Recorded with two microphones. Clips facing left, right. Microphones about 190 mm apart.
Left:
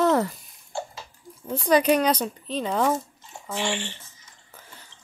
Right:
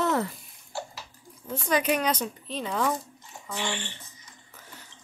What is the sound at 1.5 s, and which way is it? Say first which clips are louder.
Speech: left 6 dB; 35° left (ahead or behind).